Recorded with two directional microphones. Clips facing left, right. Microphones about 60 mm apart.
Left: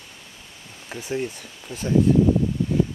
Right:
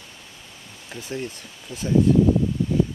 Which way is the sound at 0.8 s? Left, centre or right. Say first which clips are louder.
Left 3 dB; centre.